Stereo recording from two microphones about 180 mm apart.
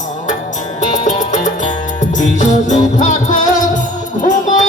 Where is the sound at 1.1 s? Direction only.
45° left (ahead or behind).